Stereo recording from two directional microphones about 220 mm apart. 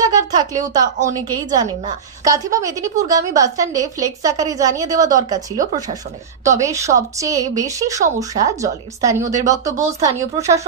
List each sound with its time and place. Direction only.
0.0 s a woman's voice: 15° right (ahead or behind)